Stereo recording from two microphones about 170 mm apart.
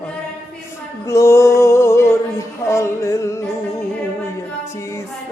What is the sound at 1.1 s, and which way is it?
Music, 15° left (ahead or behind).